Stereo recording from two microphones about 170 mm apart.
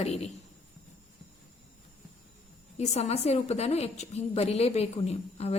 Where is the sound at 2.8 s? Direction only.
40° left (ahead or behind).